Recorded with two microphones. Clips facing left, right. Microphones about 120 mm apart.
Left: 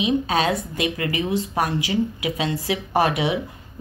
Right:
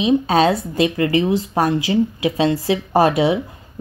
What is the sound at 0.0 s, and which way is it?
A woman's voice, 30° right (ahead or behind).